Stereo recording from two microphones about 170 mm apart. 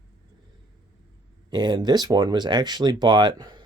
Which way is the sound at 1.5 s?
25° right (ahead or behind).